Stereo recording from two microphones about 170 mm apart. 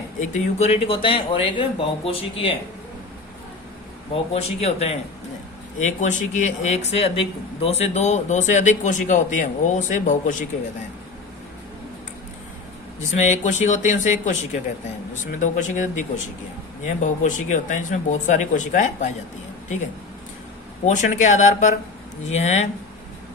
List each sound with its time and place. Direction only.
0.2 s speech: 40° left (ahead or behind)
4.1 s speech: 35° left (ahead or behind)
13.1 s speech: 45° left (ahead or behind)
20.8 s speech: 45° left (ahead or behind)